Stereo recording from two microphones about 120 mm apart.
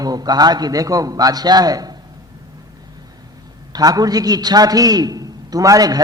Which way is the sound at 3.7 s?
30° right (ahead or behind).